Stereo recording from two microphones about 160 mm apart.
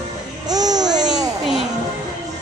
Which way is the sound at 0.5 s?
25° right (ahead or behind).